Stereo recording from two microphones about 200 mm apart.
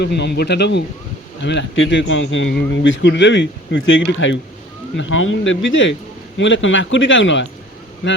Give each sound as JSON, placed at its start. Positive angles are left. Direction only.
{"t": 0.0, "sound": "a man's voice", "side_deg": 55}